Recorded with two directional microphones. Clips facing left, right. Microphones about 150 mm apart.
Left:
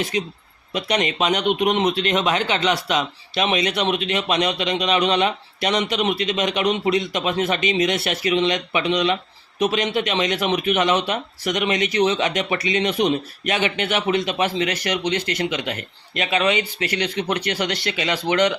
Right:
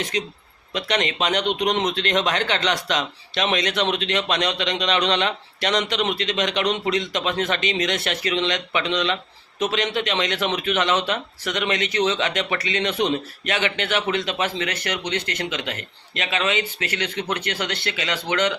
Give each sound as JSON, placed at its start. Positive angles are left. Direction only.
{"t": 0.7, "sound": "speech", "side_deg": 10}